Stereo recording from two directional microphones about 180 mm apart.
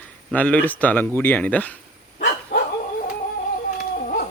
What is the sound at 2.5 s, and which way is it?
Dog, 70° left (ahead or behind).